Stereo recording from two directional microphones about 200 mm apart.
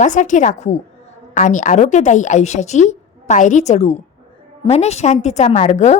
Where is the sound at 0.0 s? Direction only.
40° left (ahead or behind).